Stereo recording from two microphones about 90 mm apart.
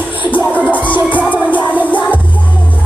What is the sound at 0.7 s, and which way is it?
Music, 65° left (ahead or behind).